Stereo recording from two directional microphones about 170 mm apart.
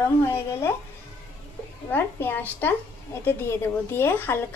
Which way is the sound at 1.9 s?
10° left (ahead or behind).